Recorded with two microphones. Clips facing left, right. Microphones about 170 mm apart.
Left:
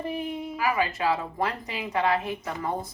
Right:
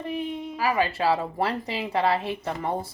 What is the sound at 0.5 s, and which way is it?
A woman's voice, 35° right (ahead or behind).